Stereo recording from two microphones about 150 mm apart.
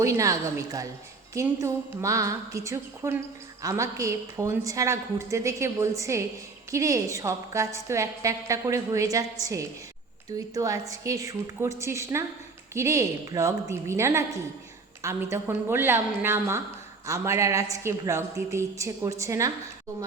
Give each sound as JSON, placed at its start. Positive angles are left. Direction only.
{"t": 0.0, "sound": "a woman's voice", "side_deg": -20}